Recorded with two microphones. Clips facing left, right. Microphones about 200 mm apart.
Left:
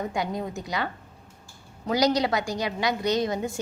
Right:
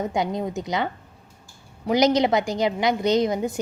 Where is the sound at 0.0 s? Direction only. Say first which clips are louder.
Right 4 dB; 20° right (ahead or behind).